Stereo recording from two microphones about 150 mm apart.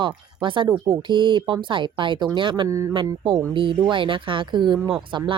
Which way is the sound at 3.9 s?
35° right (ahead or behind).